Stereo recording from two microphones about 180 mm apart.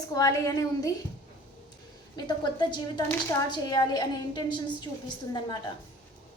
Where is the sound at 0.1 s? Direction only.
20° left (ahead or behind).